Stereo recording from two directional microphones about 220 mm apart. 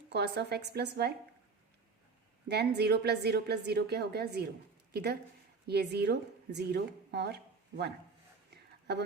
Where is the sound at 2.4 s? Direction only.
50° right (ahead or behind).